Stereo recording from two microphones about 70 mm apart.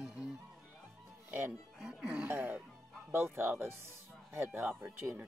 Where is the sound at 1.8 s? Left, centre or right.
Centre.